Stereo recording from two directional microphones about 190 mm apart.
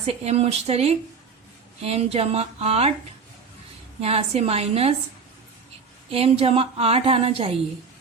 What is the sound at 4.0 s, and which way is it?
Speech, 35° right (ahead or behind).